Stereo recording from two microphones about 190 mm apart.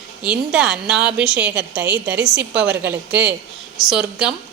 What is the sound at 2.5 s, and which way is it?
Speech, 65° right (ahead or behind).